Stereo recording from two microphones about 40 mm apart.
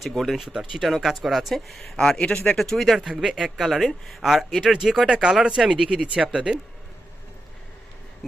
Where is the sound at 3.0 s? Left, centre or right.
Centre.